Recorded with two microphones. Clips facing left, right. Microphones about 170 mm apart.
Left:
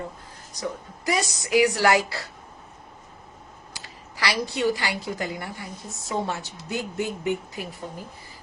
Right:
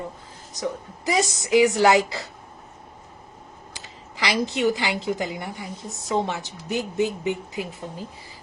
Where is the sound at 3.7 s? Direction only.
20° right (ahead or behind).